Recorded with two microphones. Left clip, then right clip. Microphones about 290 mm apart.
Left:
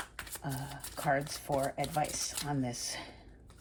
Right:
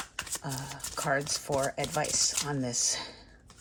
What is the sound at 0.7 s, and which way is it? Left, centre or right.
Speech, right.